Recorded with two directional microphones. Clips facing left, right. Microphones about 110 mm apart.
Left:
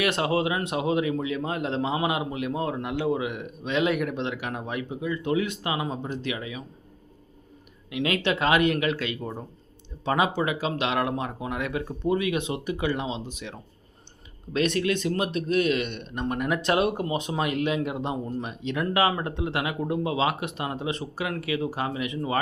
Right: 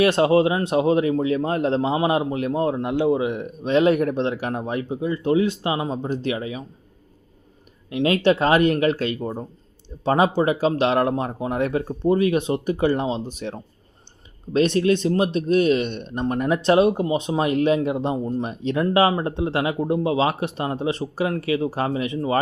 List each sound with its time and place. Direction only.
0.0 s speech: 30° right (ahead or behind)
7.9 s speech: 35° right (ahead or behind)